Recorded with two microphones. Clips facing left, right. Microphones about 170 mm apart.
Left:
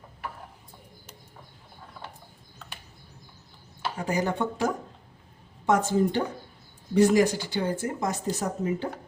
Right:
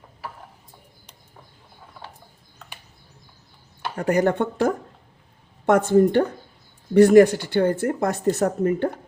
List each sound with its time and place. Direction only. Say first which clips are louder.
3.9 s speech: right 8 dB; 60° right (ahead or behind)